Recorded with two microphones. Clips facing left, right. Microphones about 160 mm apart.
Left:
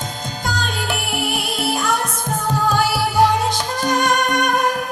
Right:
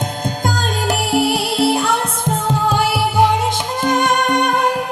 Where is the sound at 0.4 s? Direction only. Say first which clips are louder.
Right 4 dB; 45° right (ahead or behind).